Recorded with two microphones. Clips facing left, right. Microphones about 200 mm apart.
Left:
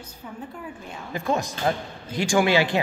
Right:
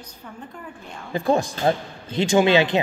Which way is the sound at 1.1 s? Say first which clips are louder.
Right 5 dB; 30° right (ahead or behind).